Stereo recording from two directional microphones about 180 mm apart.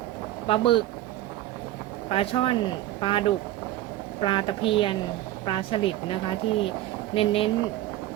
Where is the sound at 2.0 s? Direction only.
30° left (ahead or behind).